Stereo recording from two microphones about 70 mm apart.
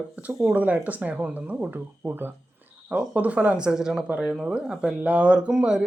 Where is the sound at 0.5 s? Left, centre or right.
Right.